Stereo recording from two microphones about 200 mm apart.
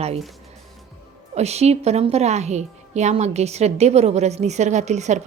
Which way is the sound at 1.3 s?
30° right (ahead or behind).